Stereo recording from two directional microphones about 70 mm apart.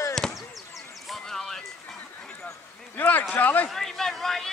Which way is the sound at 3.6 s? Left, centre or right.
Centre.